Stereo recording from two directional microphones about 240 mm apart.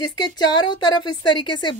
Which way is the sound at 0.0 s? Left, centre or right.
Centre.